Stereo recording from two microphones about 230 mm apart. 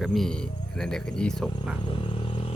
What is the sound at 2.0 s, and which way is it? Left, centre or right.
Vehicle, left.